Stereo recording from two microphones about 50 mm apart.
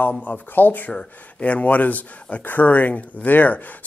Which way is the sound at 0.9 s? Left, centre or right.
Left.